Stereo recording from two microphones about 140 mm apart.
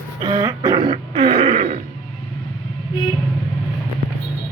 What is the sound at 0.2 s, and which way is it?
Throat clearing, 30° right (ahead or behind).